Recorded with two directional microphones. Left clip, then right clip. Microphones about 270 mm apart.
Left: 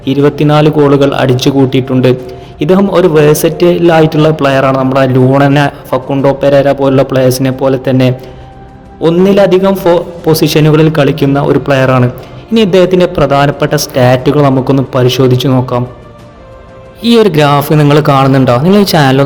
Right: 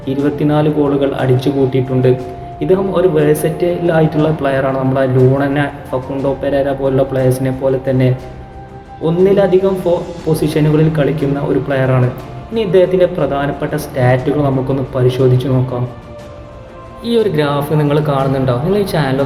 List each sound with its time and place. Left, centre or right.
0.0 s a man's voice: left
17.0 s a man's voice: left